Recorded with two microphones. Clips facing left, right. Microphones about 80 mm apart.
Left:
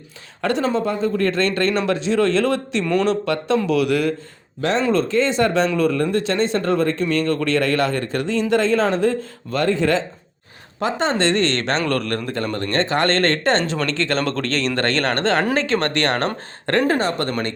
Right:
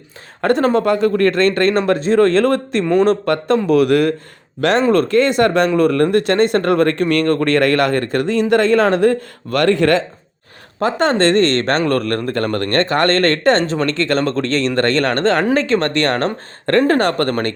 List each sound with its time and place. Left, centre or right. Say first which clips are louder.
0.4 s speech: right 6 dB; right
2.8 s speech: right 6 dB; right
3.1 s speech: right 4 dB; right
4.6 s speech: right 5 dB; right
10.8 s speech: right 5 dB; right